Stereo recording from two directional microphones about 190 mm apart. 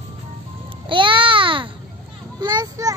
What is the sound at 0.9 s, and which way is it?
Babbling, 25° right (ahead or behind).